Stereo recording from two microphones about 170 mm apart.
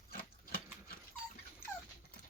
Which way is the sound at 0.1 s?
60° left (ahead or behind).